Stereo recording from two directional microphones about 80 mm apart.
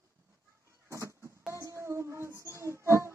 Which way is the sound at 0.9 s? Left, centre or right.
Right.